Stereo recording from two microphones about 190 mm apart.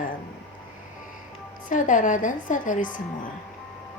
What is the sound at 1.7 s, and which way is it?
A woman's voice, 45° left (ahead or behind).